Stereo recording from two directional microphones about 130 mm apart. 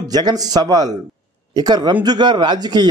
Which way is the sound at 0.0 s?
30° right (ahead or behind).